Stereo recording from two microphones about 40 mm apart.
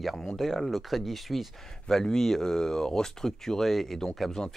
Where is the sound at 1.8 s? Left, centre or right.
Centre.